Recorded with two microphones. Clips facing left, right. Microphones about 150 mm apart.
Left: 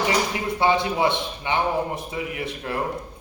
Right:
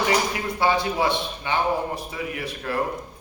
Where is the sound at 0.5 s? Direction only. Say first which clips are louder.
Left 1 dB; 20° left (ahead or behind).